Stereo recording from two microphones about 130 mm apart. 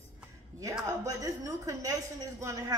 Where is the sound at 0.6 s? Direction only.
25° right (ahead or behind).